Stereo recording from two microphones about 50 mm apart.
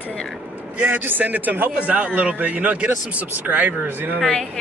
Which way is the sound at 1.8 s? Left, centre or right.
Right.